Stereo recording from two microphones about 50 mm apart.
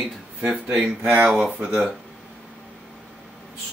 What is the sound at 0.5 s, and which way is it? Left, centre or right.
Speech, right.